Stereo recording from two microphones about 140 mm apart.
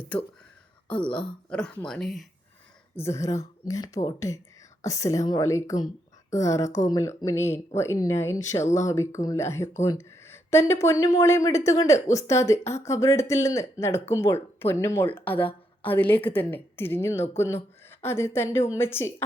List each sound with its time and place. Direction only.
0.9 s speech: 10° left (ahead or behind)
2.9 s a woman's voice: 20° left (ahead or behind)